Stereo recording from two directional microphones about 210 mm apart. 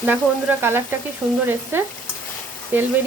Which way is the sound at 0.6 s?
10° right (ahead or behind).